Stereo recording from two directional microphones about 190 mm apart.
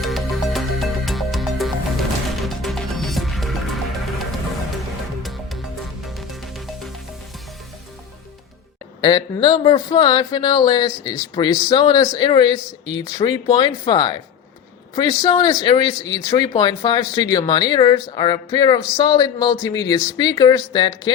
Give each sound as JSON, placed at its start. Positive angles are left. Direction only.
{"t": 0.0, "sound": "music", "side_deg": 0}
{"t": 9.0, "sound": "speech", "side_deg": 25}
{"t": 15.2, "sound": "speech", "side_deg": 20}